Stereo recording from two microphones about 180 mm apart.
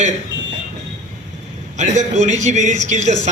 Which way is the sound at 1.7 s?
40° right (ahead or behind).